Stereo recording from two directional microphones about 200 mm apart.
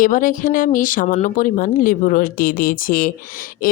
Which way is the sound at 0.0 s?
40° left (ahead or behind).